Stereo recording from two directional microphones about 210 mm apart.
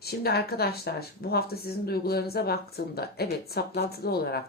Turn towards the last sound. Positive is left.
turn(degrees=50)  # may be behind; listen again after turning